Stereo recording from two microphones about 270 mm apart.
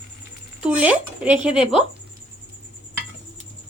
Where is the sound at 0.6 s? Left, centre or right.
Centre.